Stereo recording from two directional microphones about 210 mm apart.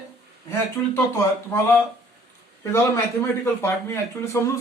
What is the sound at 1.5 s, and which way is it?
Speech, 15° left (ahead or behind).